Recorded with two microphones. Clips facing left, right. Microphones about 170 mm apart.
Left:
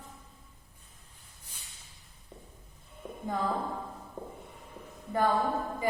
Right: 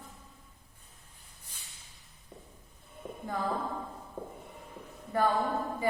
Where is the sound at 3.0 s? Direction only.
5° right (ahead or behind).